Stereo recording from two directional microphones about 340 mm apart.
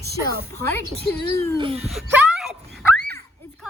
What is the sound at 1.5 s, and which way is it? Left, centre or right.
Speech, centre.